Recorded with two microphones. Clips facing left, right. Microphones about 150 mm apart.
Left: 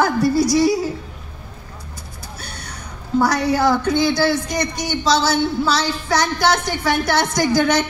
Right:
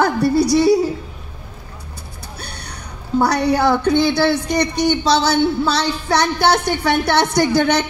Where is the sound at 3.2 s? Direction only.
60° right (ahead or behind).